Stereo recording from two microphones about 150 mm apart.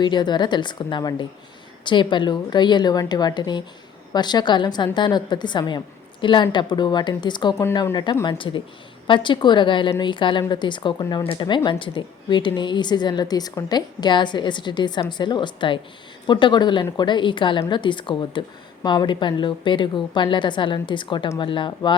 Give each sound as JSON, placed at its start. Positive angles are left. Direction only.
{"t": 0.0, "sound": "a woman's voice", "side_deg": 30}